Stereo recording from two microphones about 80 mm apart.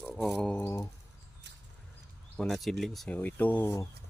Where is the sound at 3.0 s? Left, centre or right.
Left.